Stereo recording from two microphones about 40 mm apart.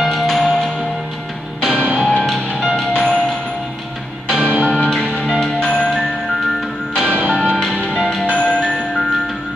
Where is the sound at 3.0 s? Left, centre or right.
Centre.